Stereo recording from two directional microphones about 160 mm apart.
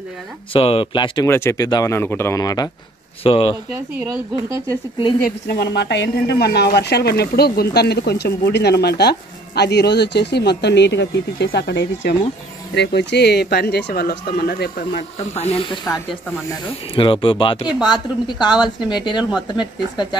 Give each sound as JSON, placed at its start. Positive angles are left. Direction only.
{"t": 0.5, "sound": "speech", "side_deg": 35}
{"t": 1.2, "sound": "speech", "side_deg": 15}
{"t": 4.0, "sound": "speech", "side_deg": -20}
{"t": 5.2, "sound": "a woman's voice", "side_deg": 85}
{"t": 15.0, "sound": "a woman's voice", "side_deg": 40}